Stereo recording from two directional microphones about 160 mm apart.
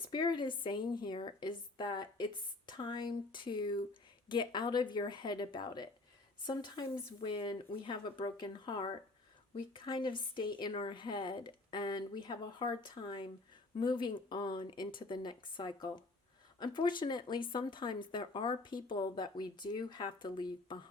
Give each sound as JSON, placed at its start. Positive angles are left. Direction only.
{"t": 0.0, "sound": "speech", "side_deg": 25}